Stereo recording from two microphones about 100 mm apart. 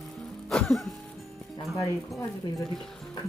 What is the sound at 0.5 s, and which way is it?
Music, centre (ahead or behind).